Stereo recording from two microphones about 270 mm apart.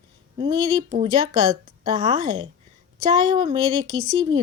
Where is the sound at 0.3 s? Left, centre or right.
Centre.